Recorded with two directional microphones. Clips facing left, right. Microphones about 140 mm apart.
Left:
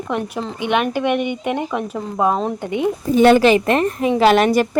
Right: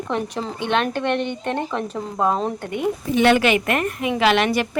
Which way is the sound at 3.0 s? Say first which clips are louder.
Left 5 dB; 40° left (ahead or behind).